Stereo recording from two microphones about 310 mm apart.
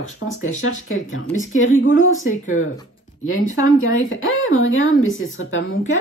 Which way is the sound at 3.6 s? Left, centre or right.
Left.